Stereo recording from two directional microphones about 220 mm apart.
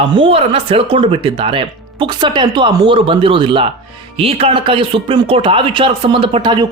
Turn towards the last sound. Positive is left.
turn(degrees=-20)  # may be behind; listen again after turning